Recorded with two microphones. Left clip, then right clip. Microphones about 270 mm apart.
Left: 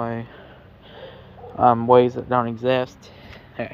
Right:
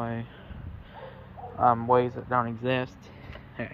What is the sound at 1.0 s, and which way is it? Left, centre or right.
Speech, left.